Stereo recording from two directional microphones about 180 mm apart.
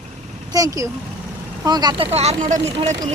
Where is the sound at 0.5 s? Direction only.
20° right (ahead or behind).